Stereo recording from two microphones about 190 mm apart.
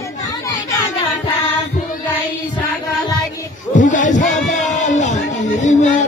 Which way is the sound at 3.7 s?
40° left (ahead or behind).